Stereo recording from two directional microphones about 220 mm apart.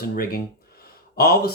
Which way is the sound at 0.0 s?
45° left (ahead or behind).